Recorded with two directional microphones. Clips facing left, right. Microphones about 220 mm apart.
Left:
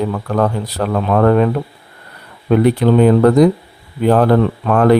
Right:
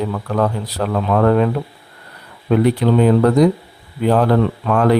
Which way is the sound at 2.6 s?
50° left (ahead or behind).